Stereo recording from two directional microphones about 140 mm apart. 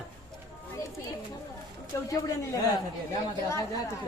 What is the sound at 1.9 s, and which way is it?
Speech, 25° left (ahead or behind).